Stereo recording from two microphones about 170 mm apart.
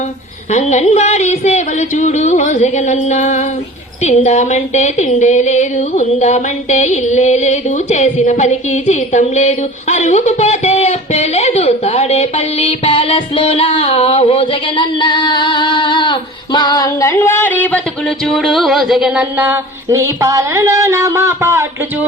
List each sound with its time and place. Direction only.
0.5 s speech: 40° left (ahead or behind); by 17.7 s 10° left (ahead or behind)
18.3 s music: centre (ahead or behind); by 21.7 s 20° right (ahead or behind)